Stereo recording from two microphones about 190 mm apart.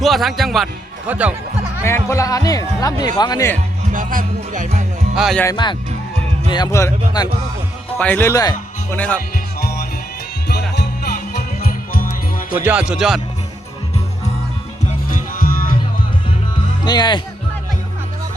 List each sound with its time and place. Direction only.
0.0 s a man's voice: centre (ahead or behind)
1.8 s speech: 15° left (ahead or behind)
3.9 s speech: 45° right (ahead or behind)
5.1 s a man's voice: centre (ahead or behind)
6.5 s speech: 20° left (ahead or behind)
9.6 s music: 55° left (ahead or behind)
12.6 s a man's voice: 5° right (ahead or behind)
15.1 s music: 45° left (ahead or behind)
16.8 s speech: 20° left (ahead or behind)